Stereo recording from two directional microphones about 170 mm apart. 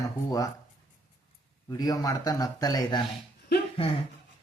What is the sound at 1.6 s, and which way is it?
Speech, 20° left (ahead or behind).